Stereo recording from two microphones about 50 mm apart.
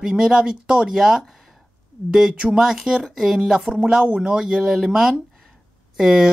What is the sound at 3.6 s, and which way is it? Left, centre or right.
Speech, centre.